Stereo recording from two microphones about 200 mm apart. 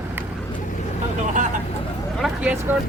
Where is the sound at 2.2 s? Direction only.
5° right (ahead or behind).